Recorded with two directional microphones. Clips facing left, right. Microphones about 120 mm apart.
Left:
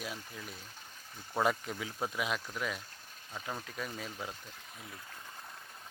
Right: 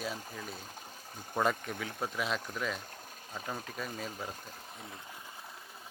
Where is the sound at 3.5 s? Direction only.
10° right (ahead or behind).